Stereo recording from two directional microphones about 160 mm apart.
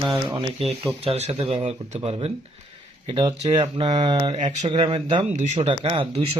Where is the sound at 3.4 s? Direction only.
40° right (ahead or behind).